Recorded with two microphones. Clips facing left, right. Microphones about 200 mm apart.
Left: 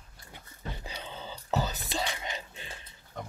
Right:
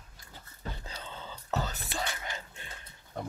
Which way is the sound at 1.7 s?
15° left (ahead or behind).